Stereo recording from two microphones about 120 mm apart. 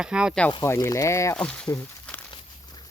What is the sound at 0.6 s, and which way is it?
Speech, 25° left (ahead or behind).